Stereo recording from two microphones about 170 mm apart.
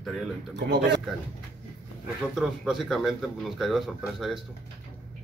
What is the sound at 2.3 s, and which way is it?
Speech, centre (ahead or behind).